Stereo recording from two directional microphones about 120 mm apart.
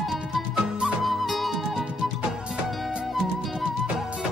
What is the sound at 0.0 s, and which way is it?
Music, 5° right (ahead or behind).